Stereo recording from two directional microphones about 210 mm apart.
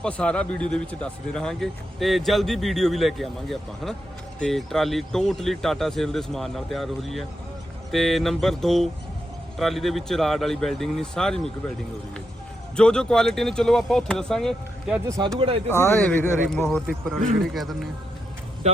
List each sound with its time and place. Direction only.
0.0 s speech: 5° left (ahead or behind)
12.7 s speech: 5° left (ahead or behind)
15.0 s speech: 15° right (ahead or behind)
15.4 s speech: 25° right (ahead or behind)
15.7 s speech: 10° left (ahead or behind)
18.6 s speech: 30° right (ahead or behind)